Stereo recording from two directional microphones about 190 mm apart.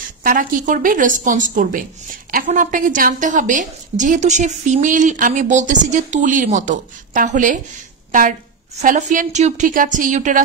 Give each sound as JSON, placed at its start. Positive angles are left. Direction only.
{"t": 0.2, "sound": "a woman's voice", "side_deg": -45}